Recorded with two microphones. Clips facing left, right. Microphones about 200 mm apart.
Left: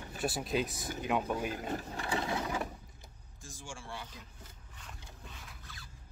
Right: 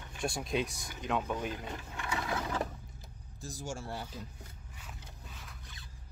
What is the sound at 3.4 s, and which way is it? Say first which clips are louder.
Speech: right 7 dB; 40° right (ahead or behind).